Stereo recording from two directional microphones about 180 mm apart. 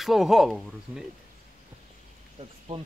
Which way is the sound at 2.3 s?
35° right (ahead or behind).